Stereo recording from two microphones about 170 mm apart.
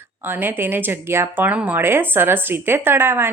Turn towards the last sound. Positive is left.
turn(degrees=-15)  # may be behind; listen again after turning